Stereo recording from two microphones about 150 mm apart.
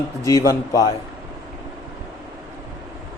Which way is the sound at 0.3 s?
20° left (ahead or behind).